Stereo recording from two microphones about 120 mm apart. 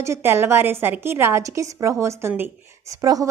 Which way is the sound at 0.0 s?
20° right (ahead or behind).